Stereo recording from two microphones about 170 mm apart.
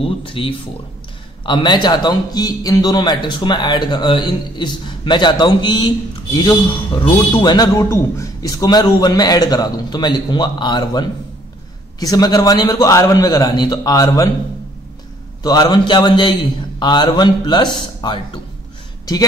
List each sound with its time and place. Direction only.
0.0 s a man's voice: 30° left (ahead or behind)
15.4 s a man's voice: 25° left (ahead or behind)